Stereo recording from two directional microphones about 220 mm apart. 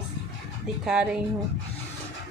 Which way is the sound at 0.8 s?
5° right (ahead or behind).